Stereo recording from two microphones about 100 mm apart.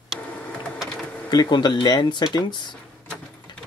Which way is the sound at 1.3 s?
45° left (ahead or behind).